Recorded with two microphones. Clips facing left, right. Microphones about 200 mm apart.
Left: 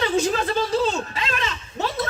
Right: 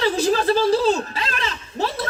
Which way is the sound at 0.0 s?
35° right (ahead or behind).